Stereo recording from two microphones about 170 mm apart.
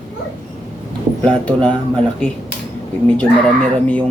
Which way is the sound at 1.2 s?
5° left (ahead or behind).